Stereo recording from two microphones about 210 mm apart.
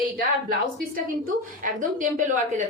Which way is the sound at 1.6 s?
40° right (ahead or behind).